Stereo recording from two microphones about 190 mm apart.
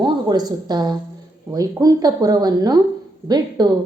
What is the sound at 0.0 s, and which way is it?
A woman's voice, 20° right (ahead or behind).